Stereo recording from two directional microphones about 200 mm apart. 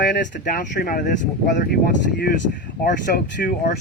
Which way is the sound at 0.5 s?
45° left (ahead or behind).